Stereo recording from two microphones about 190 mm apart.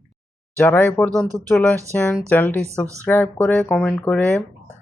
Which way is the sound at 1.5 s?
5° left (ahead or behind).